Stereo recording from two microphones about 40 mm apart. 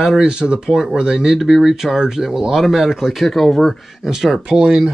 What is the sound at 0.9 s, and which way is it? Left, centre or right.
Speech, centre.